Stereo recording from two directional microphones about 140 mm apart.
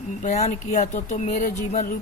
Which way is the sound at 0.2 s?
60° left (ahead or behind).